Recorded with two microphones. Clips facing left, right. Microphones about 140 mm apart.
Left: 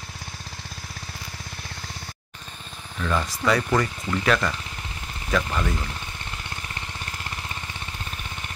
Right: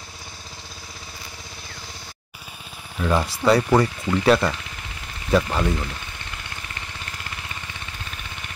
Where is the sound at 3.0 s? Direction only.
35° right (ahead or behind).